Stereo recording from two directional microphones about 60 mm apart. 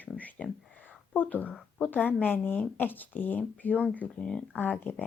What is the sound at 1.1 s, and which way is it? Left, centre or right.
A woman's voice, left.